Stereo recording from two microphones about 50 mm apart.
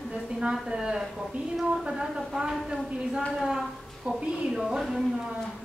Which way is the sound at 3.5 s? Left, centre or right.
Centre.